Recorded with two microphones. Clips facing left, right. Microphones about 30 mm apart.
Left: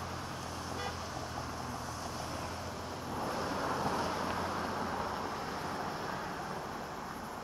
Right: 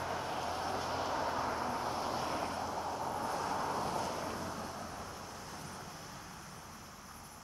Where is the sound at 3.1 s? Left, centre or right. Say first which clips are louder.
Left 4 dB; left.